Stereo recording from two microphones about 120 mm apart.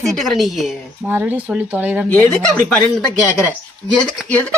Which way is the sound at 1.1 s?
15° right (ahead or behind).